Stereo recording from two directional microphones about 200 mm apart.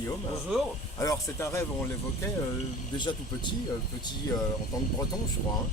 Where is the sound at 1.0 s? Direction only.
15° left (ahead or behind).